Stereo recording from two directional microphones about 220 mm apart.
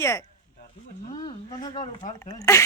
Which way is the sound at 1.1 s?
20° left (ahead or behind).